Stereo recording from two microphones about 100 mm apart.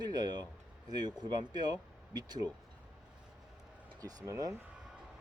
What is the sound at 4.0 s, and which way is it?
Speech, 40° right (ahead or behind).